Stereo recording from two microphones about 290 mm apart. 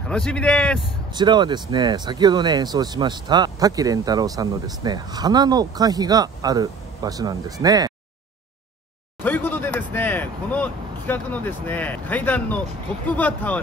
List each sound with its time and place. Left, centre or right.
0.1 s a man's voice: centre
1.1 s speech: centre
9.2 s a sound: centre